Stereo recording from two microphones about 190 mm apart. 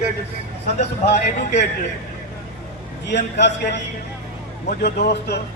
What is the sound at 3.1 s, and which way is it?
Speech, 65° left (ahead or behind).